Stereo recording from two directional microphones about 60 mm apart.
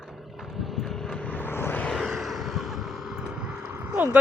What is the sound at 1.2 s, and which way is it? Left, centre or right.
Vehicle, left.